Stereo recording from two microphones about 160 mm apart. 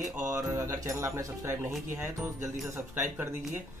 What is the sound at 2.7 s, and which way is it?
Speech, 15° right (ahead or behind).